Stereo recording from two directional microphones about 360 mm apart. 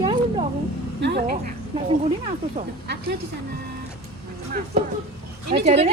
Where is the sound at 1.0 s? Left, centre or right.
Right.